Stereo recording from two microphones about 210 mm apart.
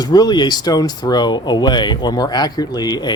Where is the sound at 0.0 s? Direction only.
20° left (ahead or behind).